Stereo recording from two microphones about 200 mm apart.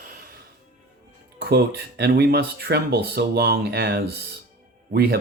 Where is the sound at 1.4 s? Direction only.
55° right (ahead or behind).